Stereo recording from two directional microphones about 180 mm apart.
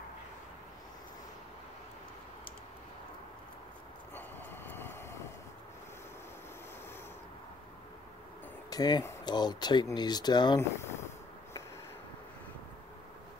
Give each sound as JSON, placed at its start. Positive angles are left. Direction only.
{"t": 4.1, "sound": "vehicle", "side_deg": 10}
{"t": 8.6, "sound": "speech", "side_deg": 20}